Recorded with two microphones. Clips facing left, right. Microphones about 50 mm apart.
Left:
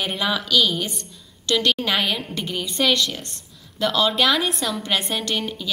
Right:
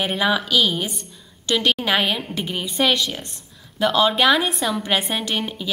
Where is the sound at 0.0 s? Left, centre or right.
Centre.